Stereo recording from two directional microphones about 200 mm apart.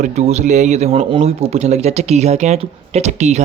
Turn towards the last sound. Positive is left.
turn(degrees=-35)  # may be behind; listen again after turning